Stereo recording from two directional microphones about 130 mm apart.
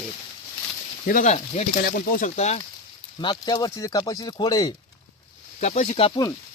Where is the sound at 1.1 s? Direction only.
70° left (ahead or behind).